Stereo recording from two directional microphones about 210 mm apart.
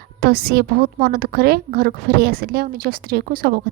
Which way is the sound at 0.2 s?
45° right (ahead or behind).